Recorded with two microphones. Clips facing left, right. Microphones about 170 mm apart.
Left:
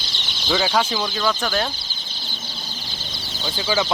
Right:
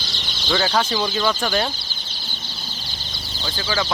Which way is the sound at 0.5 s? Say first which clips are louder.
Even; 5° left (ahead or behind).